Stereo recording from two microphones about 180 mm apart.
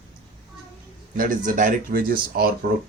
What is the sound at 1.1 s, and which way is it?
Speech, 50° right (ahead or behind).